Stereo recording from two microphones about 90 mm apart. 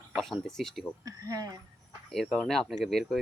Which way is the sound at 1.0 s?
40° right (ahead or behind).